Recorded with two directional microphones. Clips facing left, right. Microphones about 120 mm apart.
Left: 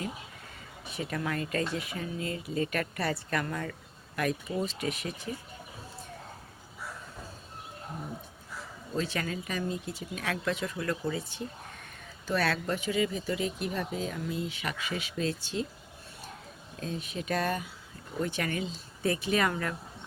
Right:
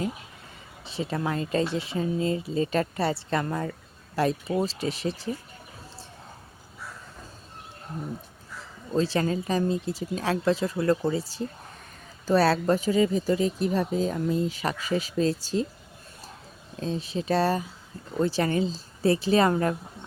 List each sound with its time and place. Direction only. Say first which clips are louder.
0.9 s speech: right 5 dB; 25° right (ahead or behind)
8.9 s speech: right 8 dB; 30° right (ahead or behind)
16.7 s speech: right 6 dB; 30° right (ahead or behind)